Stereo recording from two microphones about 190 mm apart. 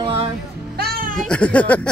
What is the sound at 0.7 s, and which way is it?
Music, 55° right (ahead or behind).